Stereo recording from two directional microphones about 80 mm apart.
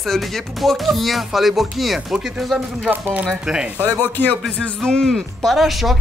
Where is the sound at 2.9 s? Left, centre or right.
Right.